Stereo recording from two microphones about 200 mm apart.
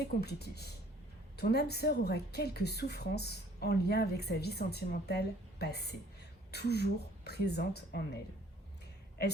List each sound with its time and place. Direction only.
0.0 s a woman's voice: 55° left (ahead or behind)